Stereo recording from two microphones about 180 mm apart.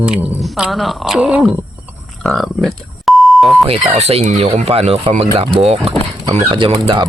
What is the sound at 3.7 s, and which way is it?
Speech, 35° right (ahead or behind).